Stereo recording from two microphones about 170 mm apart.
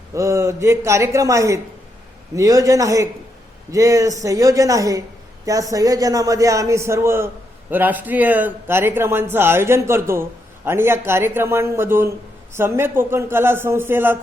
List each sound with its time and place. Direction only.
0.1 s a man's voice: 20° right (ahead or behind)